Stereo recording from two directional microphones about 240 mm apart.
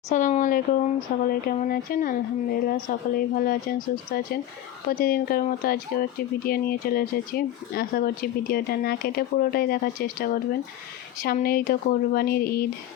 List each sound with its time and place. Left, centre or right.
0.1 s speech: left